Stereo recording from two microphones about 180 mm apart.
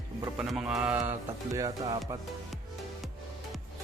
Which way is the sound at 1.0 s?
20° right (ahead or behind).